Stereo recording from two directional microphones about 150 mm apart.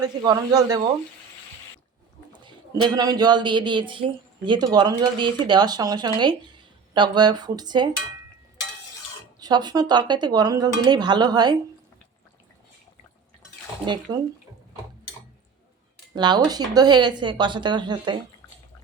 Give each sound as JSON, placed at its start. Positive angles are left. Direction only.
{"t": 0.2, "sound": "speech", "side_deg": -25}
{"t": 2.4, "sound": "speech", "side_deg": -30}
{"t": 9.4, "sound": "speech", "side_deg": -30}
{"t": 13.8, "sound": "speech", "side_deg": -30}
{"t": 16.1, "sound": "speech", "side_deg": -30}